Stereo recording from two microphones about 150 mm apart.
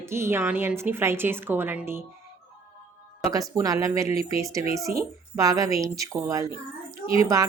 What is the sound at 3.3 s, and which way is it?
Speech, 25° right (ahead or behind).